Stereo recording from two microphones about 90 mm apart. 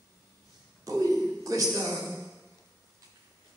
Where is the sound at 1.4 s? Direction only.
40° right (ahead or behind).